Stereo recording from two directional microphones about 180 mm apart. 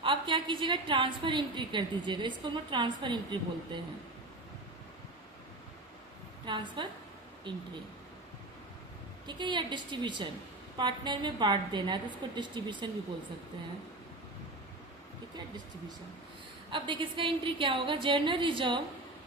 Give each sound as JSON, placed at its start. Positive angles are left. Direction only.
{"t": 0.0, "sound": "a woman's voice", "side_deg": -30}
{"t": 6.4, "sound": "a woman's voice", "side_deg": -25}
{"t": 9.2, "sound": "a woman's voice", "side_deg": -25}
{"t": 16.7, "sound": "a woman's voice", "side_deg": -25}